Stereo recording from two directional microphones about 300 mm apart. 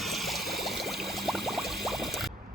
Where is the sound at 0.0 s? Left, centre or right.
Centre.